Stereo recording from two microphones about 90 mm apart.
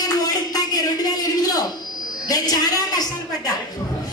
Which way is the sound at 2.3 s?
45° left (ahead or behind).